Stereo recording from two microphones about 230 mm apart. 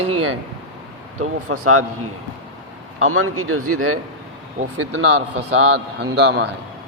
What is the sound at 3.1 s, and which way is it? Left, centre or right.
Speech, right.